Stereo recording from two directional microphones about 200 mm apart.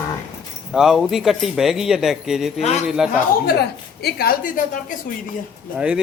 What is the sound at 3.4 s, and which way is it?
A woman's voice, 55° left (ahead or behind).